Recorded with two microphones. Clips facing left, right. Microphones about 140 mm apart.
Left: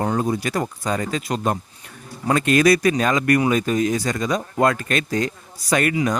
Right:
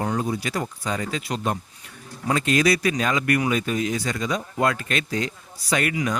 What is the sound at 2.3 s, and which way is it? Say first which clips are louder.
A man's voice: left 4 dB; 55° left (ahead or behind).